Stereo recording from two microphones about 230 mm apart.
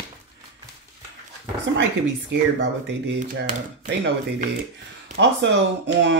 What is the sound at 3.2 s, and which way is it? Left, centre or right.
Speech, right.